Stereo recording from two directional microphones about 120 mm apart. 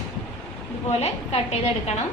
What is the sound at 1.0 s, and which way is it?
Speech, 60° left (ahead or behind).